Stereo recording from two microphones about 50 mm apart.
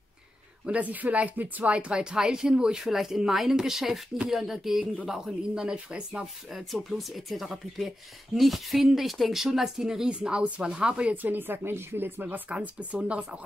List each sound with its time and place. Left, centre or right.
0.7 s speech: right
6.5 s speech: centre
11.2 s speech: right
12.4 s speech: right